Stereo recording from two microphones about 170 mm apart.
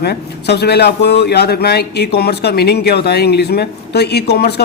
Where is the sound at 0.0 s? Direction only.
75° left (ahead or behind).